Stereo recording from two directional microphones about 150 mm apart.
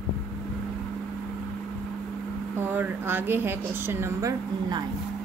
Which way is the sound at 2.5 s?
15° right (ahead or behind).